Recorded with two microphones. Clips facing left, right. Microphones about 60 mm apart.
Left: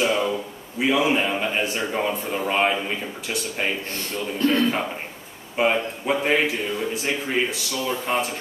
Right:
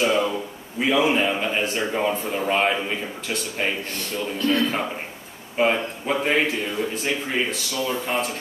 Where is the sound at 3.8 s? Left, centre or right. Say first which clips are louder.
Right 1 dB; left.